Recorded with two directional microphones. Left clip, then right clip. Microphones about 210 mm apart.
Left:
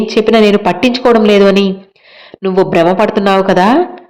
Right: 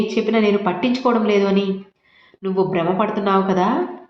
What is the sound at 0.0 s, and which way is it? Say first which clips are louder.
A woman's voice: left 10 dB; 55° left (ahead or behind).